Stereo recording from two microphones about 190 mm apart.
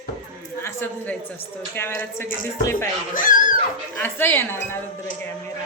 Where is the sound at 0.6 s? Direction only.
10° left (ahead or behind).